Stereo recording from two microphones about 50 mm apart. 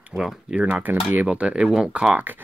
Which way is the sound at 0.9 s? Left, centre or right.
Right.